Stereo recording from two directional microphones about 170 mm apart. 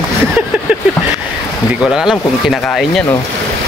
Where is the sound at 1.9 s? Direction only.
Centre (ahead or behind).